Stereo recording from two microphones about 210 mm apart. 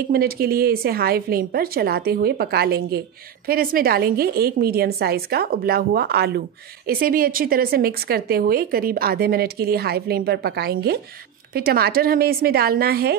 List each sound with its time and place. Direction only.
0.1 s speech: 45° right (ahead or behind)